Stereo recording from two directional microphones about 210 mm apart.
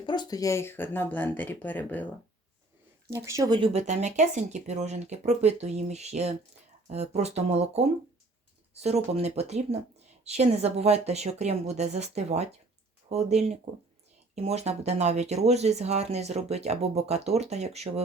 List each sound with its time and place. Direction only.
0.0 s speech: 20° left (ahead or behind)
3.2 s speech: 15° right (ahead or behind); by 18.0 s 30° right (ahead or behind)